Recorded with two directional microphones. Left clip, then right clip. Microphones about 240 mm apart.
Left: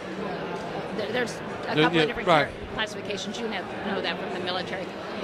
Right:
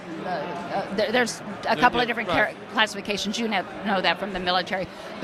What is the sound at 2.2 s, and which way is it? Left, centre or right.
Speech, left.